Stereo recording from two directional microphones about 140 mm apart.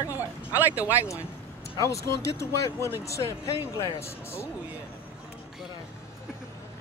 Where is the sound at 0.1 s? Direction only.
15° right (ahead or behind).